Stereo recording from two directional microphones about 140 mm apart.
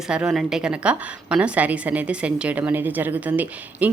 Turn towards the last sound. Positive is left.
turn(degrees=-10)  # may be behind; listen again after turning